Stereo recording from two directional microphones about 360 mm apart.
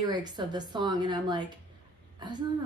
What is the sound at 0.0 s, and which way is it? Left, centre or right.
Speech, centre.